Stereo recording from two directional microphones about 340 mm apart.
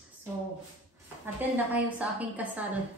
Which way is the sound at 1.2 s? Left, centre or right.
Centre.